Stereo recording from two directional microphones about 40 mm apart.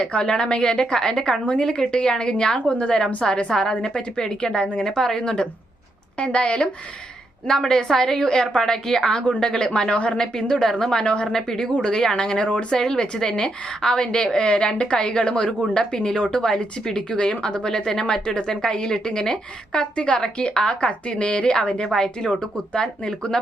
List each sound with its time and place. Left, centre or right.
0.1 s a woman's voice: left
7.4 s a woman's voice: centre
11.3 s a woman's voice: centre